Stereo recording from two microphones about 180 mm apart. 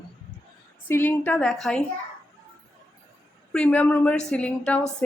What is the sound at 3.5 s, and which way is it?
Speech, 5° left (ahead or behind).